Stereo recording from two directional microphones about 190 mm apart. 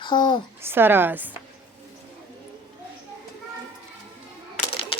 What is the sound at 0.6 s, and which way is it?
Speech, 10° right (ahead or behind).